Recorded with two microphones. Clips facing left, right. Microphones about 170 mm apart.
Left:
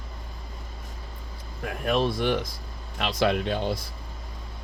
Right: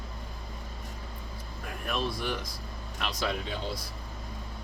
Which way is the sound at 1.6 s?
65° left (ahead or behind).